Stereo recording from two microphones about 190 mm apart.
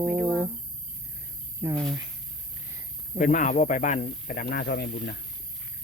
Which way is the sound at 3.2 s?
45° left (ahead or behind).